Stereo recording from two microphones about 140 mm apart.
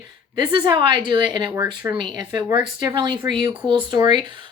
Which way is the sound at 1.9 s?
30° right (ahead or behind).